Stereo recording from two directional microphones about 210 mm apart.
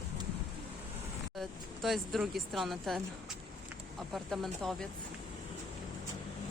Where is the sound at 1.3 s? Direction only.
Centre (ahead or behind).